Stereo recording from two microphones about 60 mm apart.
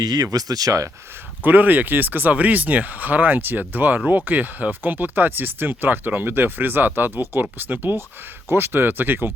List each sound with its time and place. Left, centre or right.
0.0 s speech: right
1.5 s speech: right